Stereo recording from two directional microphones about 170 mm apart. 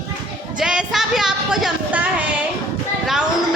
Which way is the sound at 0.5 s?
5° right (ahead or behind).